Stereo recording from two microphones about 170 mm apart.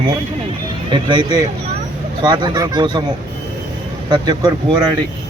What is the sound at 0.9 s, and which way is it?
Speech, 25° right (ahead or behind).